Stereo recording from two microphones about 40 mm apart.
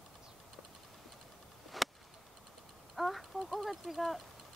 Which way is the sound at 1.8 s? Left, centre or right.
Centre.